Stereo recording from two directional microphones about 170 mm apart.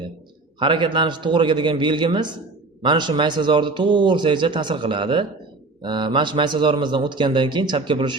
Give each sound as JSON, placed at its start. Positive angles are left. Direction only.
{"t": 0.6, "sound": "a man's voice", "side_deg": -30}